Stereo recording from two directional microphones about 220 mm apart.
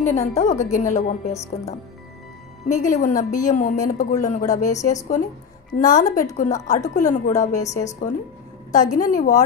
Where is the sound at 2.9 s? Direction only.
35° left (ahead or behind).